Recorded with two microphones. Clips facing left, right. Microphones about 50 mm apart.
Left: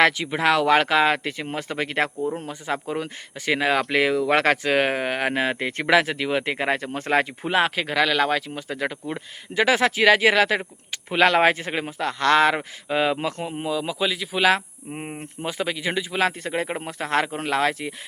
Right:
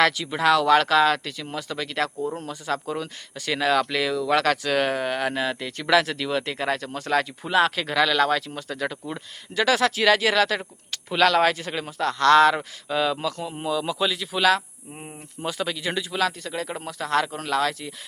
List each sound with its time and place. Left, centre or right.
0.0 s speech: left
13.5 s a man's voice: centre
14.9 s speech: left
15.4 s speech: left
16.2 s speech: left